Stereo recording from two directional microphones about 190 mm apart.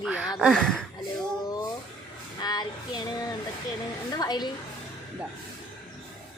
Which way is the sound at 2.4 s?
20° left (ahead or behind).